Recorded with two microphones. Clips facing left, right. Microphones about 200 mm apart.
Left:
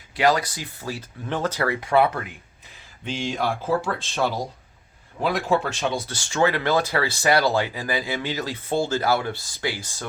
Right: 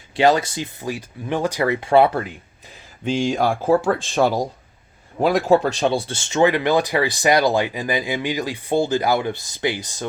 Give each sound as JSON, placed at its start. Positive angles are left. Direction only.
{"t": 0.2, "sound": "speech", "side_deg": -25}